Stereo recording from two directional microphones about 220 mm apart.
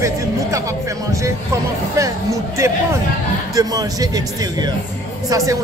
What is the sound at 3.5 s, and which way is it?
Speech, 15° right (ahead or behind).